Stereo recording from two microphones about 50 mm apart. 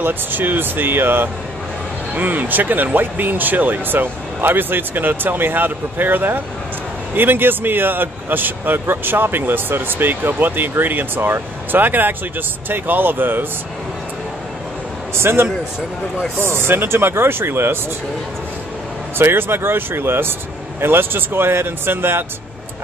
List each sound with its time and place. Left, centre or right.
0.0 s speech: right
15.1 s speech: right
19.1 s speech: right